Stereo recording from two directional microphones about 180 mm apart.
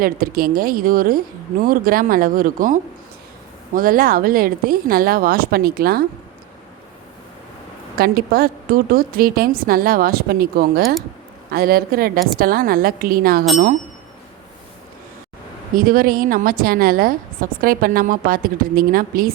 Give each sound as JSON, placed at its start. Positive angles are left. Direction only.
{"t": 0.0, "sound": "a woman's voice", "side_deg": -55}
{"t": 3.8, "sound": "a woman's voice", "side_deg": -55}
{"t": 7.9, "sound": "a woman's voice", "side_deg": -55}
{"t": 15.7, "sound": "a woman's voice", "side_deg": -50}